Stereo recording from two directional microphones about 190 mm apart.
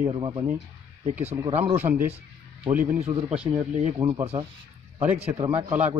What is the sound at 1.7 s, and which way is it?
Speech, 10° right (ahead or behind).